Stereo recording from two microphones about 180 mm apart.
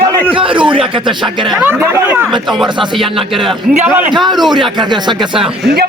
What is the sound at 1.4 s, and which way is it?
Speech, centre (ahead or behind).